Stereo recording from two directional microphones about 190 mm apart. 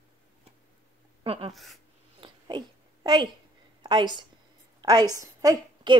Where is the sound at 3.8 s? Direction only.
25° right (ahead or behind).